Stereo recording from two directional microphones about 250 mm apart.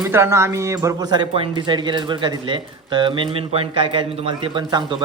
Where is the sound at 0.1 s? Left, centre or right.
Centre.